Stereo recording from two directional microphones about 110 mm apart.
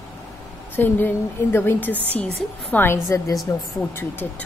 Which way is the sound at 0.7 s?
20° left (ahead or behind).